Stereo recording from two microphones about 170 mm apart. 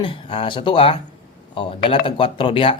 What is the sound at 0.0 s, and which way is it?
Speech, 30° left (ahead or behind).